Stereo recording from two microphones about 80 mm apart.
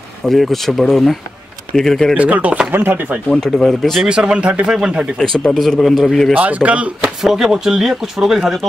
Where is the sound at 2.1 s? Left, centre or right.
Centre.